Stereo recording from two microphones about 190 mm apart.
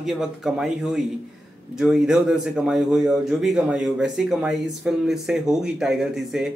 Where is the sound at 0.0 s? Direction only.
Centre (ahead or behind).